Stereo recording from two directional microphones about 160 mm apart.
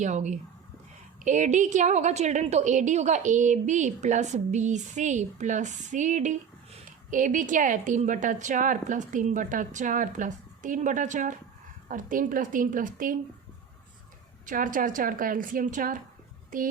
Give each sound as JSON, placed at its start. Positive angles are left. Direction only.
{"t": 0.0, "sound": "a woman's voice", "side_deg": -45}
{"t": 14.4, "sound": "a woman's voice", "side_deg": -55}